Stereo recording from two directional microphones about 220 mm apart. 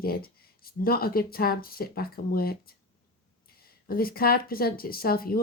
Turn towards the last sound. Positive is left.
turn(degrees=40)  # may be behind; listen again after turning